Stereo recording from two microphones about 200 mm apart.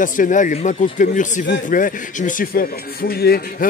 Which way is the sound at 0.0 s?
40° left (ahead or behind).